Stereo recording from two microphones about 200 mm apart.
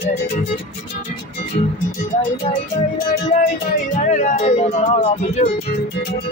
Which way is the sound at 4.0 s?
40° left (ahead or behind).